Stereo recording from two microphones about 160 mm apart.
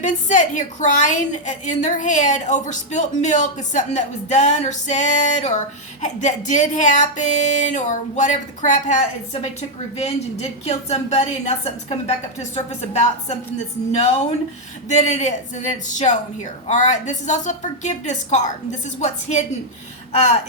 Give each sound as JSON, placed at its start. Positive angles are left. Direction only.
{"t": 0.0, "sound": "a woman's voice", "side_deg": 50}